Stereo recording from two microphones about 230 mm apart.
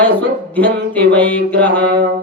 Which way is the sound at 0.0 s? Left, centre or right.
Centre.